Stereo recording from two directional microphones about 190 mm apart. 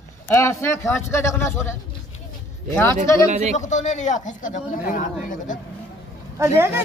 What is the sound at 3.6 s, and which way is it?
Speech, 40° left (ahead or behind).